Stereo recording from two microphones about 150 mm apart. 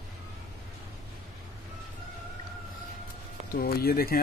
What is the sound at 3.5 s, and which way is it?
Speech, 90° left.